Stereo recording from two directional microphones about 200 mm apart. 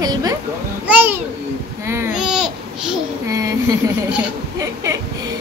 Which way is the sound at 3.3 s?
15° right (ahead or behind).